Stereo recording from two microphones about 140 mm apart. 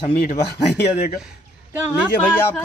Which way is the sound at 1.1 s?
5° right (ahead or behind).